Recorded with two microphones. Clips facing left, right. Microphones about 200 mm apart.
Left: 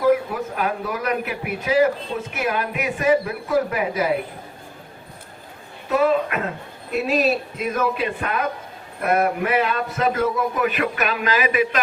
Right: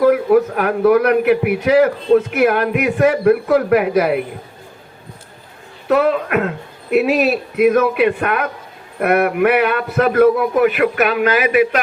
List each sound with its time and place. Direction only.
0.0 s a man's voice: 60° right (ahead or behind)
5.9 s a man's voice: 65° right (ahead or behind)